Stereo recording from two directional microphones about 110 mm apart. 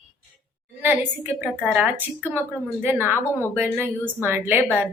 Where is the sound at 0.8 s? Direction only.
15° right (ahead or behind).